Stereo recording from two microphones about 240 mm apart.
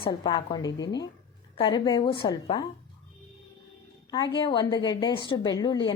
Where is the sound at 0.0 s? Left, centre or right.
Left.